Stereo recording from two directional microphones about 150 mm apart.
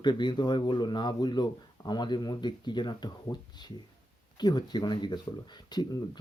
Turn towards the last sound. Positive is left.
turn(degrees=30)  # may be behind; listen again after turning